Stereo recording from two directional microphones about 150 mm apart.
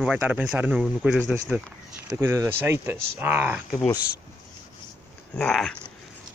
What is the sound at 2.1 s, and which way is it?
Speech, 15° right (ahead or behind).